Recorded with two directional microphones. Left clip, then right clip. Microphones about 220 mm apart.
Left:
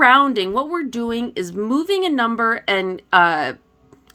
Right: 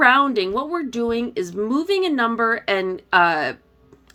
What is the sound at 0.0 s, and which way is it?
Speech, 30° left (ahead or behind).